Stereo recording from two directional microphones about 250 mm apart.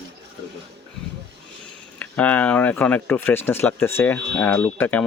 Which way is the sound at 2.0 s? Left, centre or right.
Centre.